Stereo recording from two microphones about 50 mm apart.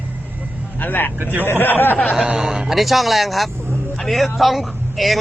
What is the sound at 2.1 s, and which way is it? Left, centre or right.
A man's voice, centre.